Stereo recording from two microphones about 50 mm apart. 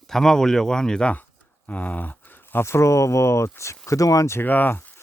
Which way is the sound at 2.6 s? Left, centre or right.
Left.